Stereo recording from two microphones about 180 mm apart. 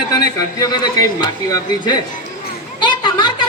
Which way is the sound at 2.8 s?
25° left (ahead or behind).